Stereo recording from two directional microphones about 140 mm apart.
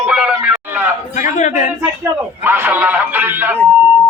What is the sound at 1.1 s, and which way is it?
Speech, 60° left (ahead or behind).